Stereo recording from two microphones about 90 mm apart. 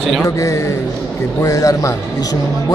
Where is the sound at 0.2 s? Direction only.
35° left (ahead or behind).